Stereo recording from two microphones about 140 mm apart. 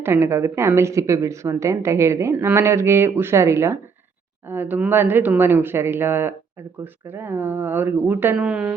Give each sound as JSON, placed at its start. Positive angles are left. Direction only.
{"t": 0.0, "sound": "a woman's voice", "side_deg": -15}